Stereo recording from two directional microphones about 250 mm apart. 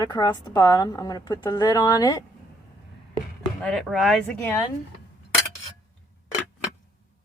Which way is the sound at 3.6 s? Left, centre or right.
Centre.